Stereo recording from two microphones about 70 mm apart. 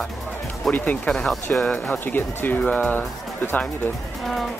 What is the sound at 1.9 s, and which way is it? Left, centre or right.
Speech, left.